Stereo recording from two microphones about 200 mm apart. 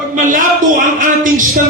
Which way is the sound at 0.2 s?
40° right (ahead or behind).